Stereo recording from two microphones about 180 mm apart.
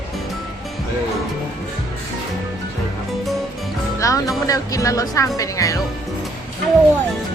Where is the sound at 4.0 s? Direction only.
20° left (ahead or behind).